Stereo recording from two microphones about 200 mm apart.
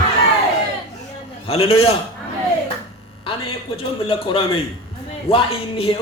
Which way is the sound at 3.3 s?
25° left (ahead or behind).